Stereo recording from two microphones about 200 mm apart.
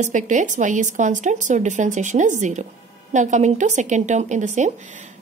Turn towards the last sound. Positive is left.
turn(degrees=-35)  # may be behind; listen again after turning